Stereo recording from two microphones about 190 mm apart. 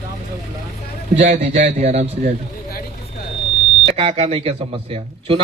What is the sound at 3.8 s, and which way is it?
Speech, 30° right (ahead or behind).